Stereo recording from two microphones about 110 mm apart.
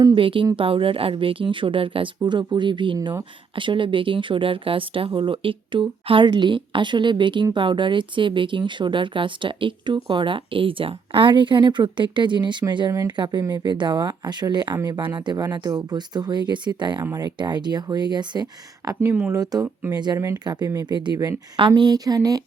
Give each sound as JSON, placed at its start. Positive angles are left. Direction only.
{"t": 0.2, "sound": "speech", "side_deg": -55}
{"t": 18.9, "sound": "speech", "side_deg": -20}
{"t": 19.3, "sound": "speech", "side_deg": -35}
{"t": 20.1, "sound": "speech", "side_deg": -25}
{"t": 20.4, "sound": "speech", "side_deg": -40}